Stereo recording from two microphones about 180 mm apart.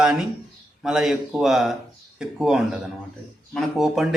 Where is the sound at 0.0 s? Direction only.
5° right (ahead or behind).